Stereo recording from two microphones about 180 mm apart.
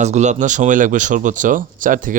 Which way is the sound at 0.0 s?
40° right (ahead or behind).